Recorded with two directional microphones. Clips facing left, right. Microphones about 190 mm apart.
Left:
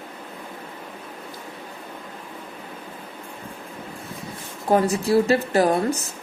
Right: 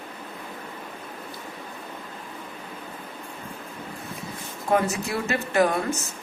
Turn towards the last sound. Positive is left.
turn(degrees=35)  # may be behind; listen again after turning